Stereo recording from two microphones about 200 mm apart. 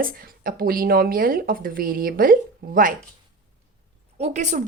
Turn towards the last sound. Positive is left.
turn(degrees=-35)  # may be behind; listen again after turning